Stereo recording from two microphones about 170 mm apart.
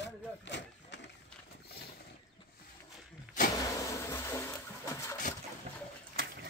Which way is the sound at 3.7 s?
15° left (ahead or behind).